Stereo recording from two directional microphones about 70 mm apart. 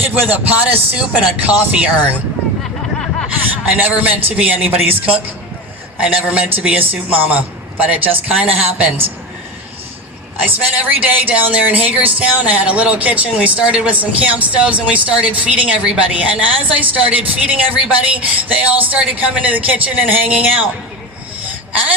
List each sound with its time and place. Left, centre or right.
0.0 s a man's voice: right
3.8 s a woman's voice: right
10.4 s a woman's voice: right